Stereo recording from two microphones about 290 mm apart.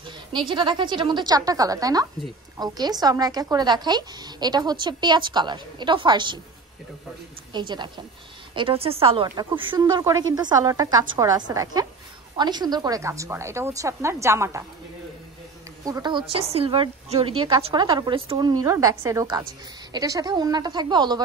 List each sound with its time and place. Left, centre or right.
0.0 s a woman's voice: centre
7.5 s a woman's voice: centre
15.8 s a woman's voice: centre